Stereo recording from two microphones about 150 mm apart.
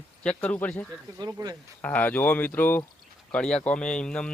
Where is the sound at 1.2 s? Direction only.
25° right (ahead or behind).